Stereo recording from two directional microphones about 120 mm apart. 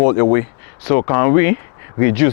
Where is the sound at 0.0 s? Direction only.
25° left (ahead or behind).